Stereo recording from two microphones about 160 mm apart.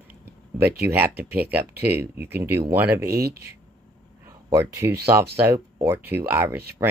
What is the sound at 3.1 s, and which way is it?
Speech, 75° right (ahead or behind).